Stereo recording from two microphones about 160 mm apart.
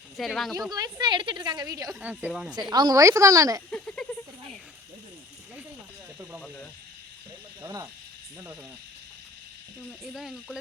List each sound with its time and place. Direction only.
0.2 s speech: centre (ahead or behind)
0.7 s a woman's voice: 25° right (ahead or behind)
1.9 s a woman's voice: 10° right (ahead or behind)
2.5 s a woman's voice: 25° right (ahead or behind)
3.7 s a sound: 5° left (ahead or behind)
7.6 s a woman's voice: 20° right (ahead or behind)
10.0 s speech: 5° right (ahead or behind)